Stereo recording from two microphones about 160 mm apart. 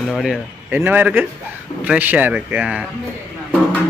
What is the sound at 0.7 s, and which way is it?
Speech, 10° right (ahead or behind).